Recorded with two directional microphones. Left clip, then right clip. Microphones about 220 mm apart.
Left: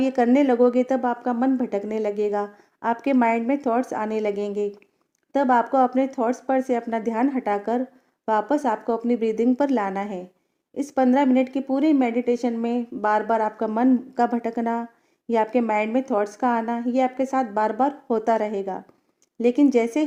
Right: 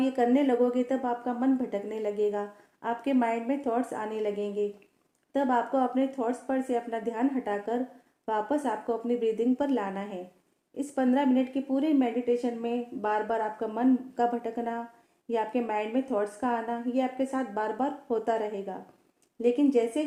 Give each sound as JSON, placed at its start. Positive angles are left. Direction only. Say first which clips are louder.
{"t": 0.0, "sound": "a woman's voice", "louder": "left 6 dB", "side_deg": 35}